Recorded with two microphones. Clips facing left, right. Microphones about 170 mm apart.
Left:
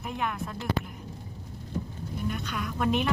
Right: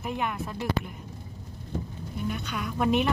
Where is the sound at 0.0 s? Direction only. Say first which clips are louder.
Right 2 dB; centre (ahead or behind).